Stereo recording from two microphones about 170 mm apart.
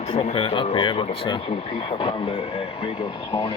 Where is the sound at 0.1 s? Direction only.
35° left (ahead or behind).